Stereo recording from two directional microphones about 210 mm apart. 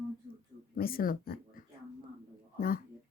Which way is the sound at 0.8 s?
45° left (ahead or behind).